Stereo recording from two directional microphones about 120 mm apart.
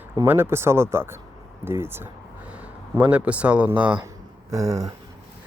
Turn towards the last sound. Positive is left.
turn(degrees=-30)  # may be behind; listen again after turning